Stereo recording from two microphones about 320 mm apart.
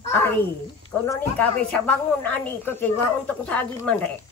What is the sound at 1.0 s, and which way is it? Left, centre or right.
Speech, centre.